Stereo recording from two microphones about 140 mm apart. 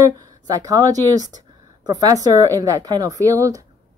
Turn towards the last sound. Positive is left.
turn(degrees=-25)  # may be behind; listen again after turning